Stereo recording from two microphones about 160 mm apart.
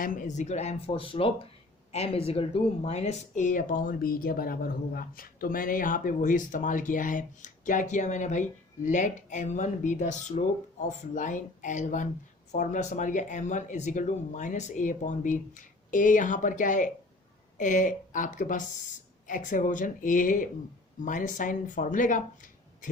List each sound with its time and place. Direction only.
0.0 s speech: 55° left (ahead or behind)